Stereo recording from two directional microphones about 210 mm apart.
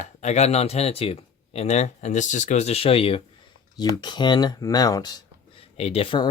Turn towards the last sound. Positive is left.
turn(degrees=25)  # may be behind; listen again after turning